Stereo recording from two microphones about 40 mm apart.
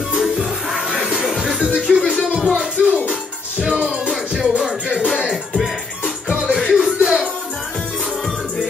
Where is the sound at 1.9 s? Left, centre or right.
Centre.